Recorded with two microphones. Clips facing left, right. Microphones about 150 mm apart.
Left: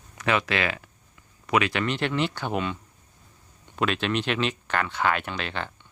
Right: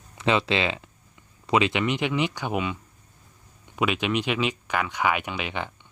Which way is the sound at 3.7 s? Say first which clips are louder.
Right 1 dB; 10° right (ahead or behind).